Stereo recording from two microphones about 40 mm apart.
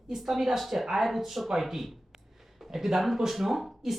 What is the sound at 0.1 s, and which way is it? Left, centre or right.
Speech, centre.